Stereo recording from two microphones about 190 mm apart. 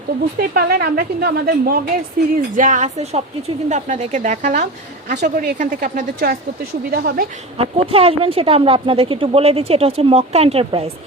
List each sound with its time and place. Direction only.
0.3 s a woman's voice: 55° right (ahead or behind)
2.6 s a woman's voice: 40° right (ahead or behind)
7.6 s speech: 30° right (ahead or behind)